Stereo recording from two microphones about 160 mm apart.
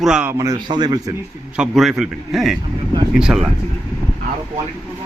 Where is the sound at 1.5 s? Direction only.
5° right (ahead or behind).